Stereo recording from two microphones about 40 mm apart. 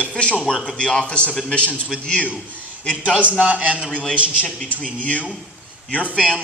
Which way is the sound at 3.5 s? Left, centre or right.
Right.